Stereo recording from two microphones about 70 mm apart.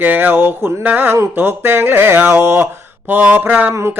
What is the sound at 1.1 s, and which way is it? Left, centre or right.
Speech, right.